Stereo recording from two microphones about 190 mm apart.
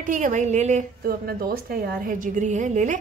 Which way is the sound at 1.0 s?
50° right (ahead or behind).